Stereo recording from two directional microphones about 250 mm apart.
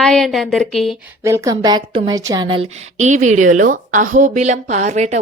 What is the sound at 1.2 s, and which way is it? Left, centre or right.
Speech, centre.